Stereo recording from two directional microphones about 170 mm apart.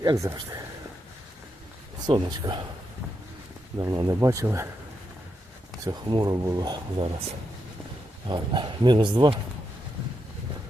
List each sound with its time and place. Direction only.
0.0 s speech: 20° right (ahead or behind)
2.0 s speech: 25° right (ahead or behind)
3.8 s speech: 20° right (ahead or behind)
5.8 s speech: 25° right (ahead or behind)
8.3 s speech: 30° right (ahead or behind)